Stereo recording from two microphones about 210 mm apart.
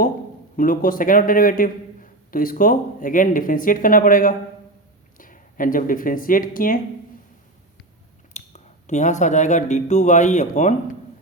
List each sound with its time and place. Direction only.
0.5 s a man's voice: 40° left (ahead or behind)
8.3 s speech: 35° left (ahead or behind)